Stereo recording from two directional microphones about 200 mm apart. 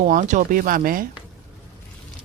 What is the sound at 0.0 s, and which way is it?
Speech, 40° right (ahead or behind).